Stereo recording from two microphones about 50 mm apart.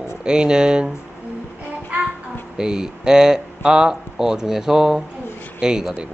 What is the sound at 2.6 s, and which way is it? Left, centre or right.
Speech, centre.